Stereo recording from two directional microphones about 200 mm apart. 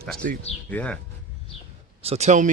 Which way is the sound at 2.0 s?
30° right (ahead or behind).